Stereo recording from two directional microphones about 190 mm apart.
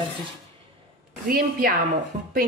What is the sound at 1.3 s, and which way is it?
Speech, 50° right (ahead or behind).